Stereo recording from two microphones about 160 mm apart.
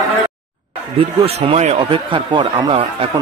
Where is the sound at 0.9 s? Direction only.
35° right (ahead or behind).